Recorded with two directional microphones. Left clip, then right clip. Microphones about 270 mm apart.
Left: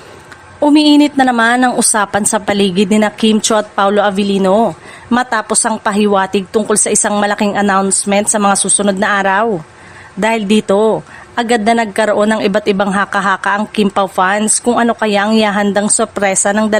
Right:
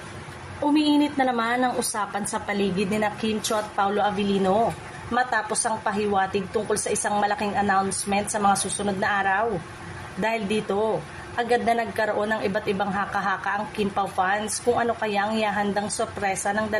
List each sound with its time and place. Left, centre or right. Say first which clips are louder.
0.6 s a man's voice: left 13 dB; left